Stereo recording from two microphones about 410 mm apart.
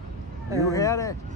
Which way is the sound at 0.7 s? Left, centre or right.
Centre.